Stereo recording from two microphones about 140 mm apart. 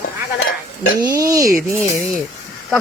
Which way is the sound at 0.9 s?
25° right (ahead or behind).